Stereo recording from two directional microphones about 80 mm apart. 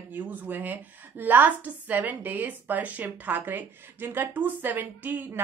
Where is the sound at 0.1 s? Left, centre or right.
Right.